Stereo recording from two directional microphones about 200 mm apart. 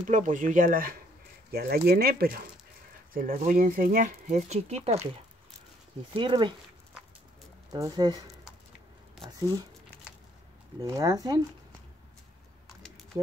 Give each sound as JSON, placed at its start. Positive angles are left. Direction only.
{"t": 0.0, "sound": "speech", "side_deg": -40}
{"t": 6.1, "sound": "speech", "side_deg": -25}
{"t": 7.7, "sound": "speech", "side_deg": -20}
{"t": 10.8, "sound": "speech", "side_deg": -20}